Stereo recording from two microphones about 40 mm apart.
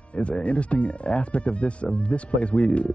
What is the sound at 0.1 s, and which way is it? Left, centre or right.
Speech, left.